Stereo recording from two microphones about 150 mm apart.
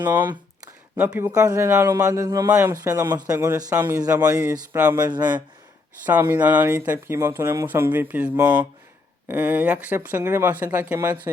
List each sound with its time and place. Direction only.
0.9 s a man's voice: 10° right (ahead or behind); by 5.4 s 30° right (ahead or behind)
6.1 s speech: 10° right (ahead or behind)